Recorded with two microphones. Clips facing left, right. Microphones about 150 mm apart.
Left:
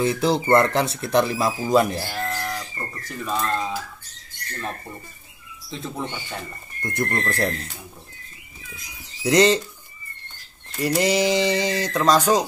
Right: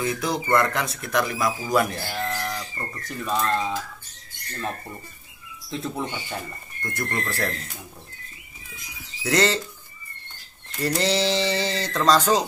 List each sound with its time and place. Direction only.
0.0 s speech: 30° left (ahead or behind)
2.0 s speech: 5° left (ahead or behind)
5.7 s speech: centre (ahead or behind)
6.8 s speech: 20° left (ahead or behind)
9.2 s speech: 20° left (ahead or behind)
10.8 s speech: 15° left (ahead or behind)